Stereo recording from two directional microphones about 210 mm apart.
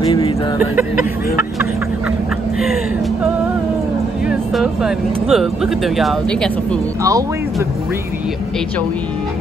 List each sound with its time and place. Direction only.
0.0 s a sound: 25° left (ahead or behind)
4.3 s speech: centre (ahead or behind)
7.0 s speech: 15° right (ahead or behind)